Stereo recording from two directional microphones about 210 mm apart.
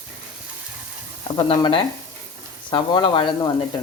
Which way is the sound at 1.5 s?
25° left (ahead or behind).